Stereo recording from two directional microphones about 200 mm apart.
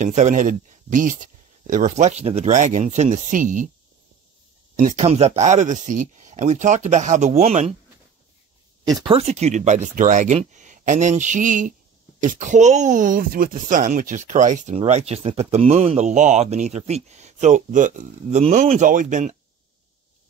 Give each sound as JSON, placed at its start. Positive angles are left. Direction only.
{"t": 0.0, "sound": "speech", "side_deg": -35}
{"t": 4.7, "sound": "speech", "side_deg": -35}
{"t": 9.0, "sound": "speech", "side_deg": -30}